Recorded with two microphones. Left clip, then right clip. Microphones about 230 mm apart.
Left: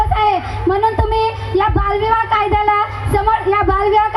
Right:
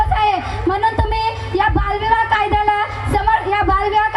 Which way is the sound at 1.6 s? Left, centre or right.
Right.